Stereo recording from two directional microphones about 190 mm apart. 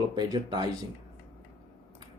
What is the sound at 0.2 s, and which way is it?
Speech, 20° right (ahead or behind).